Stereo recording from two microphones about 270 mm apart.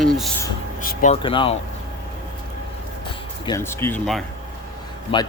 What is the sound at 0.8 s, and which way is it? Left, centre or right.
Speech, left.